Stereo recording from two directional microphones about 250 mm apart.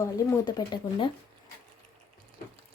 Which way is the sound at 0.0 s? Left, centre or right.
Centre.